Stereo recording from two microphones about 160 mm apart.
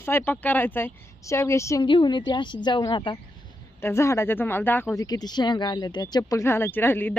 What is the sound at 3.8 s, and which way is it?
Speech, 15° left (ahead or behind).